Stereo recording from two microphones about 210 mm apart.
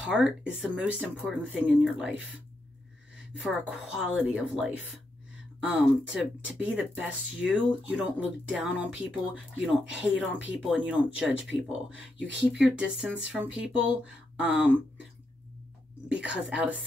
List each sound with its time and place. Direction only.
0.0 s speech: 5° right (ahead or behind)
3.4 s speech: 5° right (ahead or behind)
16.1 s speech: 5° right (ahead or behind)